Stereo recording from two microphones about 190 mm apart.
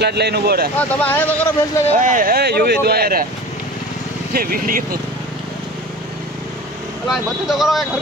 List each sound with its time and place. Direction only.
0.0 s speech: 60° right (ahead or behind)
0.7 s speech: 10° left (ahead or behind)
2.0 s speech: 45° right (ahead or behind)
4.3 s speech: 50° right (ahead or behind)
7.1 s speech: centre (ahead or behind)